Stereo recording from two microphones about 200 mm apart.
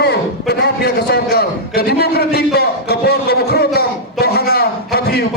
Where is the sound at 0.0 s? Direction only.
55° left (ahead or behind).